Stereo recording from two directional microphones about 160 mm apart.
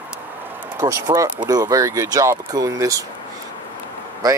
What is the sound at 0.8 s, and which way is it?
Speech, 20° right (ahead or behind).